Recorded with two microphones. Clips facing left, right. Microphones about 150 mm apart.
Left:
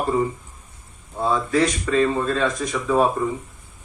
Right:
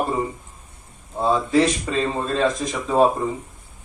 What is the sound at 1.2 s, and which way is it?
Speech, 25° right (ahead or behind).